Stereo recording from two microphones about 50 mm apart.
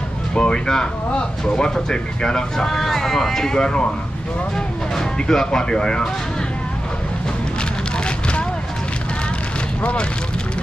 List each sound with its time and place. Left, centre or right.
0.3 s speech: centre
4.9 s speech: centre